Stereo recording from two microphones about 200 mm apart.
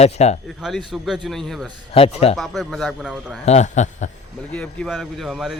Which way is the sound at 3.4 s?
35° left (ahead or behind).